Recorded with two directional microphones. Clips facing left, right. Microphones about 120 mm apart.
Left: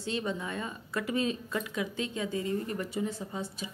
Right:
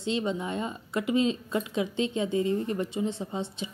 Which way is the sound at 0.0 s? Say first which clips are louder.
Right 4 dB; 20° right (ahead or behind).